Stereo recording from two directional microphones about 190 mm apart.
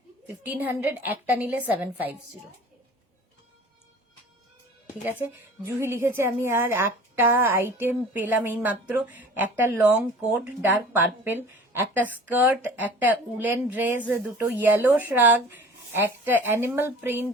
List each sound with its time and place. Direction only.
0.3 s a woman's voice: 10° right (ahead or behind)
5.6 s a woman's voice: 10° right (ahead or behind)